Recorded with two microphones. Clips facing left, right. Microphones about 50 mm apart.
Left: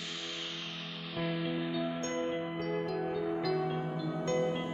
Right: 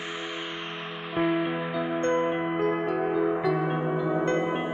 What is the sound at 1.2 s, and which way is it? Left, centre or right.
Music, right.